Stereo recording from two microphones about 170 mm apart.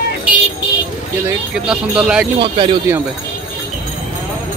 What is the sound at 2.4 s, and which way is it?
Speech, 30° right (ahead or behind).